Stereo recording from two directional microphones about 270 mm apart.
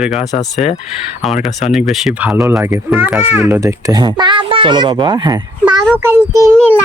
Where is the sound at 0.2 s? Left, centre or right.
Centre.